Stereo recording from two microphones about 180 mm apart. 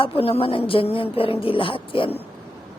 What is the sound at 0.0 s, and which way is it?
A woman's voice, 30° left (ahead or behind).